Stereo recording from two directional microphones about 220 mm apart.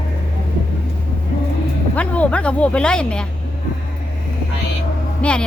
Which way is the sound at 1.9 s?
5° left (ahead or behind).